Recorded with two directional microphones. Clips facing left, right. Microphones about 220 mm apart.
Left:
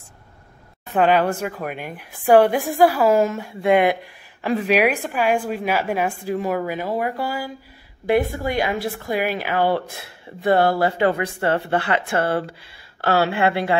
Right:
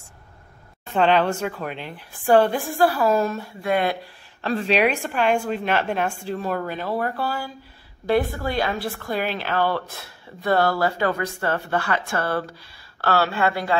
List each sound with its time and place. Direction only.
0.9 s a woman's voice: 10° left (ahead or behind)